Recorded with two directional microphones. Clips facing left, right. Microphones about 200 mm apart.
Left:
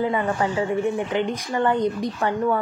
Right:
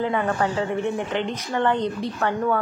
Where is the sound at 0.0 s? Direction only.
10° left (ahead or behind).